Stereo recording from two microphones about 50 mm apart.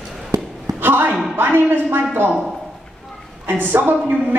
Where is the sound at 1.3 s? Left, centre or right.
Right.